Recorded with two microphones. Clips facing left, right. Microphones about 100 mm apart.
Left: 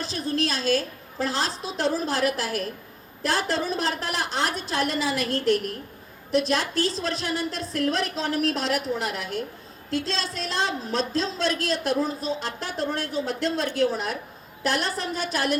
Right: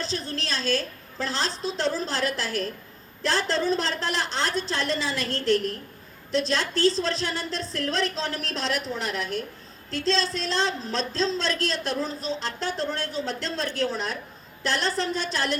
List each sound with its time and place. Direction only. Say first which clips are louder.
0.1 s a woman's voice: left 4 dB; 30° right (ahead or behind)